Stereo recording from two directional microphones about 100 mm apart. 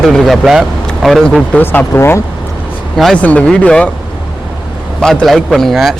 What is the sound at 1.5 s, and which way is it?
Speech, 20° left (ahead or behind).